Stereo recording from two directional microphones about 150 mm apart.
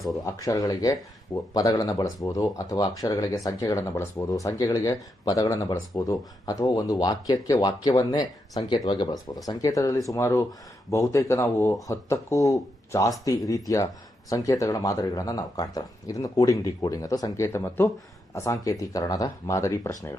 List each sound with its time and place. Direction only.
0.3 s speech: 25° left (ahead or behind)